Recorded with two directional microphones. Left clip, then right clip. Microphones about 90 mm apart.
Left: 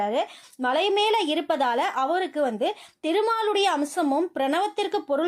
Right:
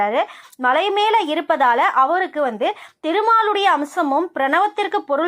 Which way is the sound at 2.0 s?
20° left (ahead or behind).